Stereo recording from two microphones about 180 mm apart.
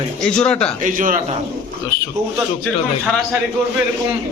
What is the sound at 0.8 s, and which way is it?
Speech, 45° right (ahead or behind).